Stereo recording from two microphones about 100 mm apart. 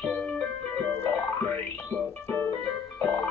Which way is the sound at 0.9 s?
25° left (ahead or behind).